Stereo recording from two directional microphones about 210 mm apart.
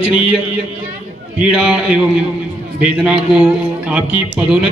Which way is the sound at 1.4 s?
5° right (ahead or behind).